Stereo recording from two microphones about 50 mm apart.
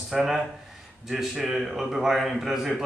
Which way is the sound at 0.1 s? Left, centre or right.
Centre.